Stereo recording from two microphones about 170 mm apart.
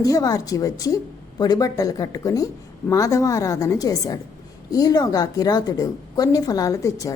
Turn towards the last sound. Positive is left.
turn(degrees=20)  # may be behind; listen again after turning